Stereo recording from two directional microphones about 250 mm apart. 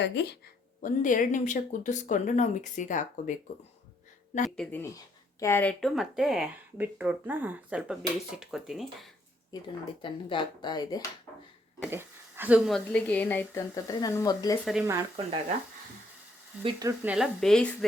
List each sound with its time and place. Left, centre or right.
0.0 s speech: left
0.8 s speech: left
4.5 s speech: centre
9.5 s speech: centre
11.8 s speech: centre
14.6 s speech: centre
16.6 s speech: centre